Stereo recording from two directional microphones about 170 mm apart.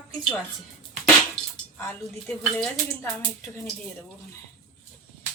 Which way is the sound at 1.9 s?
10° left (ahead or behind).